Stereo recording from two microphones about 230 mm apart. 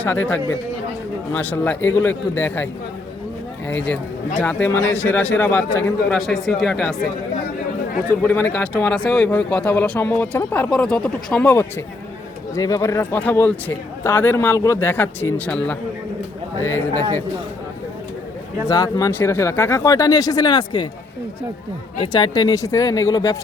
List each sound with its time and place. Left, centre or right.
0.0 s speech: centre
4.4 s speech: centre
8.2 s speech: centre
16.9 s speech: centre
18.7 s speech: centre
22.0 s speech: centre